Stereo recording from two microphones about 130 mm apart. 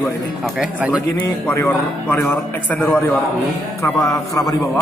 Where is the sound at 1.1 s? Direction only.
20° left (ahead or behind).